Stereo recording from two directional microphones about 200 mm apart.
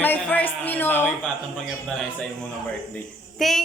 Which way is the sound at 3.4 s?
Centre (ahead or behind).